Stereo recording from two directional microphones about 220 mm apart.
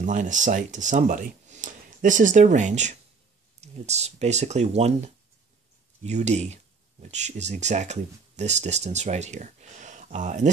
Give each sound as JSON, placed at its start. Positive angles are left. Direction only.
{"t": 0.0, "sound": "speech", "side_deg": -35}